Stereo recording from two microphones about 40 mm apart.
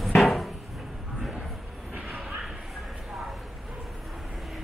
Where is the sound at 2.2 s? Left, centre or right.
Centre.